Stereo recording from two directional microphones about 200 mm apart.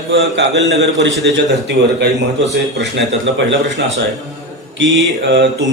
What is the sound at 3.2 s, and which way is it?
Speech, 65° right (ahead or behind).